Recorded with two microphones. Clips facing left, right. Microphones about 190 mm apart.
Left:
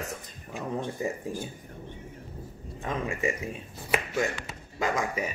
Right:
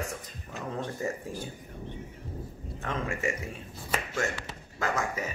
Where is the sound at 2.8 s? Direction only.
15° left (ahead or behind).